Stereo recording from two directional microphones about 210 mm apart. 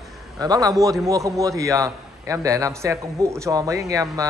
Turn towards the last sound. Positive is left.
turn(degrees=-15)  # may be behind; listen again after turning